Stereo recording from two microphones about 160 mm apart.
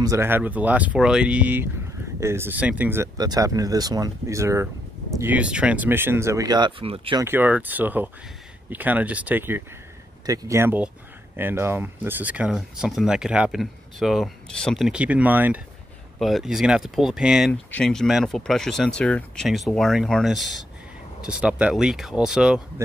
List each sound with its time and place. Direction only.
0.0 s speech: 20° right (ahead or behind); by 7.2 s 35° right (ahead or behind)
7.2 s speech: 15° right (ahead or behind)
16.2 s speech: centre (ahead or behind)